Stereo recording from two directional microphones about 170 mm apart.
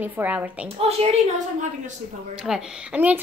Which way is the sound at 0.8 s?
35° right (ahead or behind).